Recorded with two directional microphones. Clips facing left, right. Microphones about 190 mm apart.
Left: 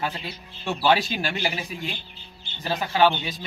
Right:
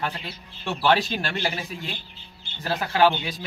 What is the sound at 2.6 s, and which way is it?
Speech, 15° left (ahead or behind).